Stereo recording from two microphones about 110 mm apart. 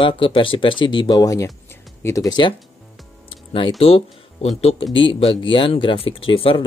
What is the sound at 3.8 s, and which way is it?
Speech, 65° left (ahead or behind).